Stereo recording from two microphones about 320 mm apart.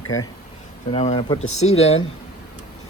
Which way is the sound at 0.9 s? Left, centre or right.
Centre.